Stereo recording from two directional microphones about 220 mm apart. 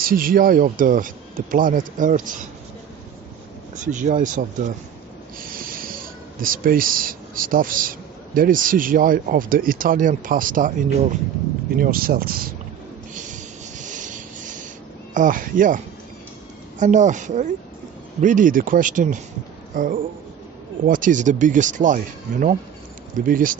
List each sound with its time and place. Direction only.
0.0 s speech: 40° right (ahead or behind)
3.9 s speech: 35° right (ahead or behind)
5.4 s a sound: 40° right (ahead or behind)
6.4 s speech: 40° right (ahead or behind)
13.1 s a sound: 35° right (ahead or behind)
15.1 s speech: 35° right (ahead or behind)
16.8 s speech: 35° right (ahead or behind)